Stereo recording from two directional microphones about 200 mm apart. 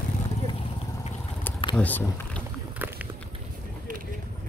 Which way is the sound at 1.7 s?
5° left (ahead or behind).